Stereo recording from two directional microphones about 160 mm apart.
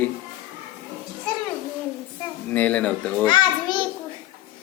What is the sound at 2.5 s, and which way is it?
Speech, 10° left (ahead or behind).